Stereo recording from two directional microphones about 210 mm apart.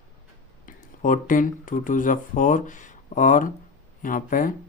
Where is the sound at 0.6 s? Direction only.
40° left (ahead or behind).